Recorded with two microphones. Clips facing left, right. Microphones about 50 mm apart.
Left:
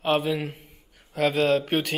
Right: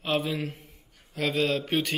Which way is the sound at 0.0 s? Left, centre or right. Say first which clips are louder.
Left 4 dB; centre.